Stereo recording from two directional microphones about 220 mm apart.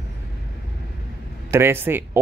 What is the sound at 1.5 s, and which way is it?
Speech, 10° right (ahead or behind).